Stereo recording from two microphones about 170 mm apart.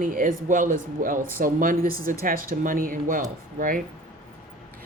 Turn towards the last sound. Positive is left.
turn(degrees=-55)  # may be behind; listen again after turning